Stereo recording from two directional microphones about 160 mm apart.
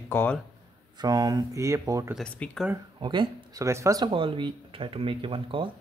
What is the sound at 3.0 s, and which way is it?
Speech, 30° right (ahead or behind).